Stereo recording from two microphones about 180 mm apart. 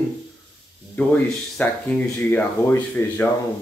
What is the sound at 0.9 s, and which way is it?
Speech, 10° left (ahead or behind).